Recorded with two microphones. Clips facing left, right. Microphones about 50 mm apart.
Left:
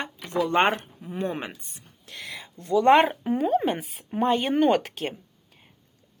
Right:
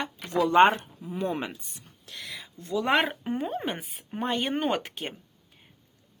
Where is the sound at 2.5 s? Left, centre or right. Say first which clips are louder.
Left 8 dB; left.